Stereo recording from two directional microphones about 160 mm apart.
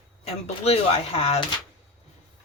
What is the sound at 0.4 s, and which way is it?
Speech, 40° left (ahead or behind).